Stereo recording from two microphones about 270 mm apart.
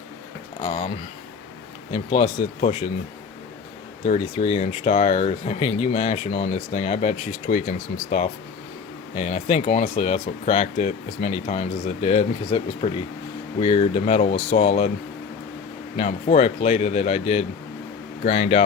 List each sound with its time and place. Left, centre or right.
0.6 s speech: left
1.9 s speech: centre
4.0 s speech: left
16.0 s speech: left